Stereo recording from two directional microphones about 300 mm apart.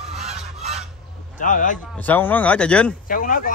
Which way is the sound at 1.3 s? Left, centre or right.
Left.